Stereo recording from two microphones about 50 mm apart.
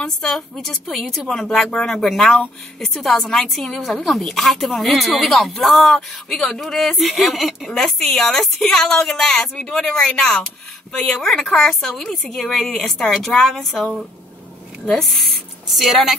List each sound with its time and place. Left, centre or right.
0.0 s a woman's voice: centre